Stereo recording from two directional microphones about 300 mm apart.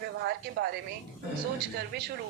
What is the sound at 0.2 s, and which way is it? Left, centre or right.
Speech, right.